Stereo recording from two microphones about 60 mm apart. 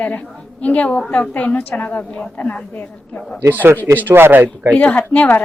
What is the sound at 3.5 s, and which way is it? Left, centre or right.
Speech, right.